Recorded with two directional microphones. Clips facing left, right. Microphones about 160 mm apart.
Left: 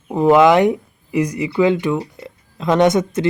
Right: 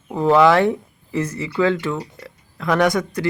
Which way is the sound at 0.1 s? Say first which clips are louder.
Left 3 dB; 20° left (ahead or behind).